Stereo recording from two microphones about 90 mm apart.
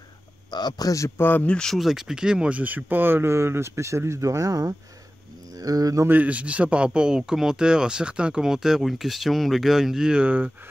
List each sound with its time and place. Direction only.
0.5 s a man's voice: 50° left (ahead or behind); by 1.5 s 25° left (ahead or behind)
1.5 s speech: 5° left (ahead or behind); by 6.0 s 40° right (ahead or behind)
6.0 s speech: 20° right (ahead or behind)